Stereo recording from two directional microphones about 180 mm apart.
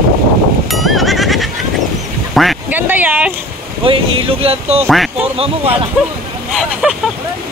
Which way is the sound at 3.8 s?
30° right (ahead or behind).